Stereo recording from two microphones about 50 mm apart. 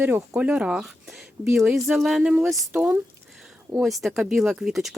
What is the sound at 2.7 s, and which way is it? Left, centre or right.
Speech, right.